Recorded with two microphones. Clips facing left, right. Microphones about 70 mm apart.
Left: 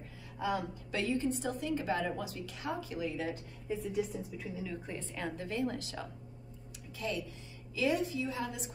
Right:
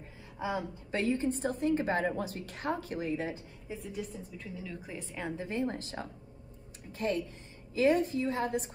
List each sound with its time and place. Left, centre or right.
0.4 s a woman's voice: right
0.9 s a woman's voice: right
3.6 s a woman's voice: centre
4.9 s a woman's voice: centre
5.3 s a woman's voice: right